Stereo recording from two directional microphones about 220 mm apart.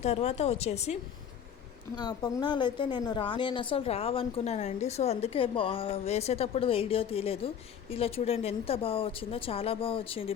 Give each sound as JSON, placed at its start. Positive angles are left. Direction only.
{"t": 0.0, "sound": "a woman's voice", "side_deg": 30}
{"t": 2.0, "sound": "a woman's voice", "side_deg": 20}